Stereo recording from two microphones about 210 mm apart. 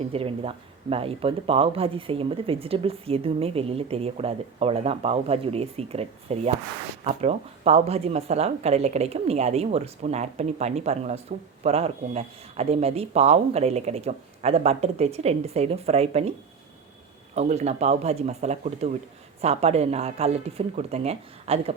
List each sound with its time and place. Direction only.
0.0 s speech: 25° right (ahead or behind)
17.3 s speech: 30° right (ahead or behind)